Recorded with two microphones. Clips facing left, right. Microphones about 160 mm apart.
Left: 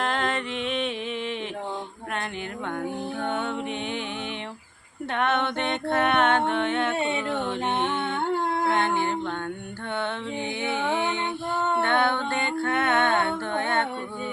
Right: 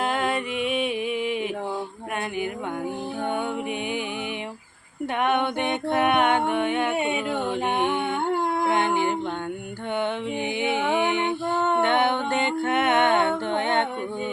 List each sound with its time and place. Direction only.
0.0 s music: 10° right (ahead or behind)
5.1 s music: 10° right (ahead or behind)
10.6 s music: 15° right (ahead or behind)